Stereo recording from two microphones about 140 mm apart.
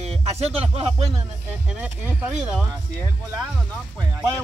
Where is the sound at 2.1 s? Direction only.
10° right (ahead or behind).